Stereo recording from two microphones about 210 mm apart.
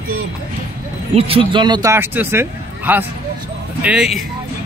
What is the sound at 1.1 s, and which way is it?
A man's voice, 25° right (ahead or behind).